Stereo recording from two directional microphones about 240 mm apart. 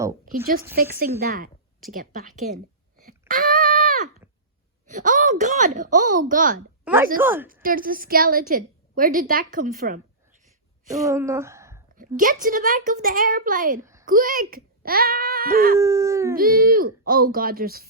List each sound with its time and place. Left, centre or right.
0.3 s a woman's voice: right
3.0 s a sound: right
4.9 s a woman's voice: right
6.8 s speech: centre
7.2 s howl: centre
7.4 s a woman's voice: right
11.0 s speech: centre
11.9 s a woman's voice: right
15.8 s howl: centre
16.3 s a woman's voice: right